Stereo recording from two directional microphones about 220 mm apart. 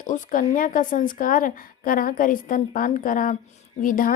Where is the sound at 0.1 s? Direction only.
35° left (ahead or behind).